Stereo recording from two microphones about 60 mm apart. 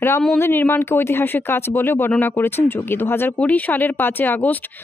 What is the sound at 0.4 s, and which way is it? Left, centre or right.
Speech, left.